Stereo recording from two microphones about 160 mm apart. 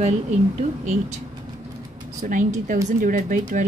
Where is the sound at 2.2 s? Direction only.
50° right (ahead or behind).